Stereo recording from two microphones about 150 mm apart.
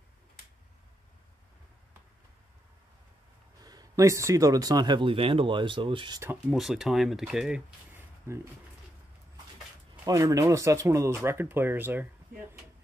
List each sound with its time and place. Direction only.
3.6 s speech: 25° right (ahead or behind)
6.5 s speech: centre (ahead or behind)
8.3 s speech: 15° right (ahead or behind)
10.0 s speech: 20° right (ahead or behind)